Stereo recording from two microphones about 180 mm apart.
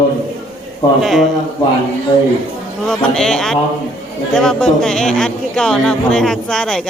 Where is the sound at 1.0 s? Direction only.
Centre (ahead or behind).